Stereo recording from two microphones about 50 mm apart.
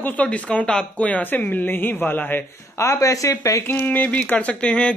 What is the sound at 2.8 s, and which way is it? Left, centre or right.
Speech, left.